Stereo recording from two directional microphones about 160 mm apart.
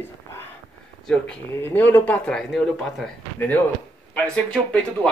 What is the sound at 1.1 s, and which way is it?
Speech, 10° left (ahead or behind).